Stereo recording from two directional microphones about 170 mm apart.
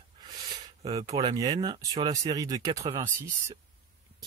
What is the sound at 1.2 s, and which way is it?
Speech, 25° right (ahead or behind).